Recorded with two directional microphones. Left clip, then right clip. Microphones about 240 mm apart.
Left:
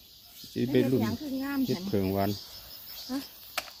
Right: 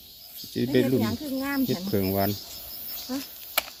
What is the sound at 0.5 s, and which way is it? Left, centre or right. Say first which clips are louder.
Speech: right 3 dB; centre.